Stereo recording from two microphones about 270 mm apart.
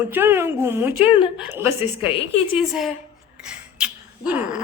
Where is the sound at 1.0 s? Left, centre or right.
Centre.